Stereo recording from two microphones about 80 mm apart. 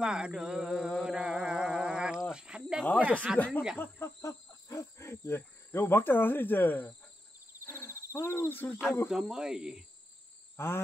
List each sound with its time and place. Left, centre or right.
0.0 s music: centre
2.3 s cricket: centre
3.0 s speech: centre
3.3 s speech: left
4.2 s speech: left
7.6 s hoot: left
9.1 s speech: centre
10.6 s wild animals: left